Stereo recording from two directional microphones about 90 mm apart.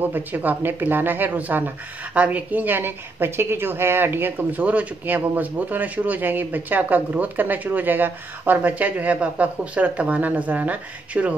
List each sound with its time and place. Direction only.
0.0 s a woman's voice: 20° right (ahead or behind)